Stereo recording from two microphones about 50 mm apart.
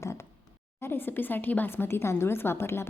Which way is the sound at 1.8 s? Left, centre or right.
Left.